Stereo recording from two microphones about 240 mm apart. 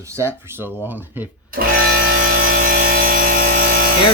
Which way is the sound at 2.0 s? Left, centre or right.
Right.